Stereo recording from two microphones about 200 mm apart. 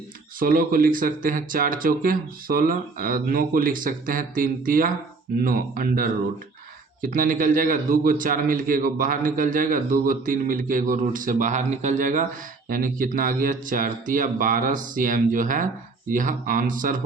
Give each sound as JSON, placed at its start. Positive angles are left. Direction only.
{"t": 0.3, "sound": "a man's voice", "side_deg": -45}